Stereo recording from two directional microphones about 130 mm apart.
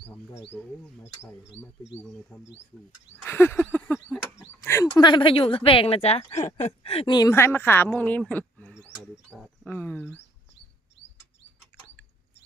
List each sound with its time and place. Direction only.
0.5 s speech: 5° left (ahead or behind)
3.2 s a sound: 20° left (ahead or behind)
4.9 s speech: 35° left (ahead or behind)
7.1 s speech: 30° left (ahead or behind)
7.3 s speech: 20° left (ahead or behind)
11.7 s a sound: 10° left (ahead or behind)